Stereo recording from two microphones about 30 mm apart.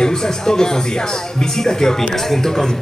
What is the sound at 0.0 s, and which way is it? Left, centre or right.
A woman's voice, left.